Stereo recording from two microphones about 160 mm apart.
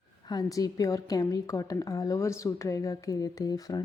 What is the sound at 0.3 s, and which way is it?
A woman's voice, 20° left (ahead or behind).